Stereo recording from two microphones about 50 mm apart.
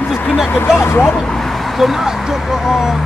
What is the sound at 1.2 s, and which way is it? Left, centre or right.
Speech, centre.